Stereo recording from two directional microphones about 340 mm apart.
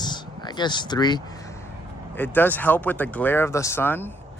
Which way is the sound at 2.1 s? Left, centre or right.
Centre.